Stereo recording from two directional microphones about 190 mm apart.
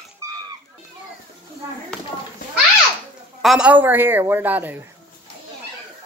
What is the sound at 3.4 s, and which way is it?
A man's voice, 5° right (ahead or behind).